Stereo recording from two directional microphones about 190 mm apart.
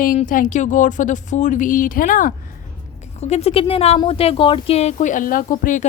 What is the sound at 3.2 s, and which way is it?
Speech, 35° left (ahead or behind).